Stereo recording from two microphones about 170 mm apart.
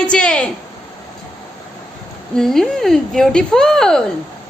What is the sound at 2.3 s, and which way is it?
Speech, centre (ahead or behind).